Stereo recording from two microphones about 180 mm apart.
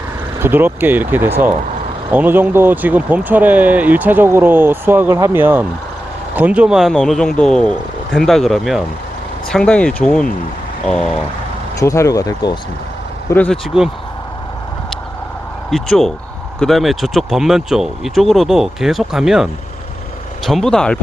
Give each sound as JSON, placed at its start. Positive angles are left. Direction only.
{"t": 0.3, "sound": "speech", "side_deg": -10}
{"t": 11.8, "sound": "speech", "side_deg": 15}
{"t": 13.3, "sound": "speech", "side_deg": 10}
{"t": 15.7, "sound": "speech", "side_deg": 0}